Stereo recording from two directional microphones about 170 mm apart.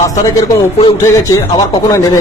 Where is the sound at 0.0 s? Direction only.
20° left (ahead or behind).